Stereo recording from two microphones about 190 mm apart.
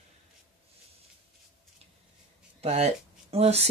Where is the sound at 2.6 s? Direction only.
35° right (ahead or behind).